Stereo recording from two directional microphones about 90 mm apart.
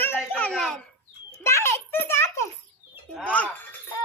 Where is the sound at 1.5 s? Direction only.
30° left (ahead or behind).